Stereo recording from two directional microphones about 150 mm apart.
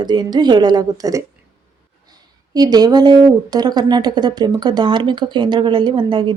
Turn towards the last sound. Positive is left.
turn(degrees=-35)  # may be behind; listen again after turning